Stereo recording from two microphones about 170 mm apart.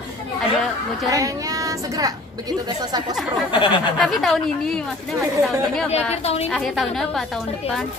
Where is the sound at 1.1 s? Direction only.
20° right (ahead or behind).